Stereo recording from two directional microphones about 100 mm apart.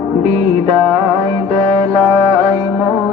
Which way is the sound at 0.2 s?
90° right.